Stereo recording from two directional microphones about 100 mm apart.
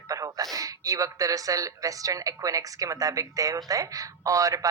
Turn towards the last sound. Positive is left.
turn(degrees=-35)  # may be behind; listen again after turning